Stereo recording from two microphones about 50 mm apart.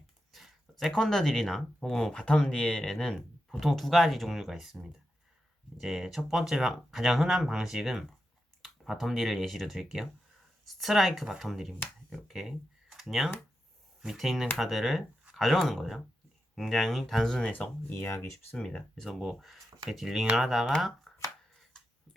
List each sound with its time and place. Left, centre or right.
0.3 s a sound: centre
0.9 s speech: centre
18.0 s speech: left
18.5 s speech: centre
21.1 s shuffling cards: centre